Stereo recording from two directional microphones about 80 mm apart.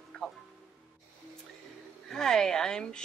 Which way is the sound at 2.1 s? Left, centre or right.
Centre.